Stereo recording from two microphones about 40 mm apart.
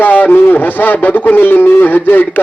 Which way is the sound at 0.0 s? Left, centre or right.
Left.